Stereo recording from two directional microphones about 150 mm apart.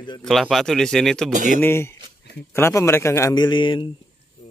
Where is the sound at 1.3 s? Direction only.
60° right (ahead or behind).